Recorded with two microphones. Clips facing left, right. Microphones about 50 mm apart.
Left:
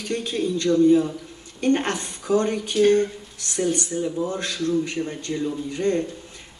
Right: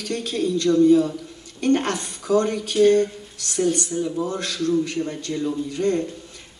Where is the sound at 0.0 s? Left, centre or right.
Left.